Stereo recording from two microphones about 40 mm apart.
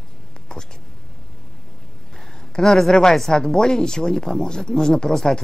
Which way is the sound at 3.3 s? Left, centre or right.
Centre.